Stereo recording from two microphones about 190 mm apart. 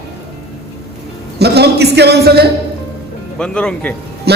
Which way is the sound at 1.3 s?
60° right (ahead or behind).